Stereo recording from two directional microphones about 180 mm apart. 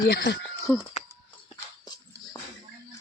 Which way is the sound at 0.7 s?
10° left (ahead or behind).